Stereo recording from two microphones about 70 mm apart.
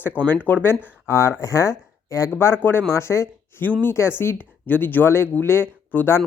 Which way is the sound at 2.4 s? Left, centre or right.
Left.